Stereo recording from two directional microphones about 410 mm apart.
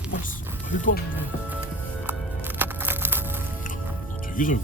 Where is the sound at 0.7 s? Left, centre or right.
Centre.